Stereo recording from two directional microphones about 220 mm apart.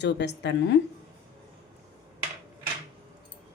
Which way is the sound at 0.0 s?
50° left (ahead or behind).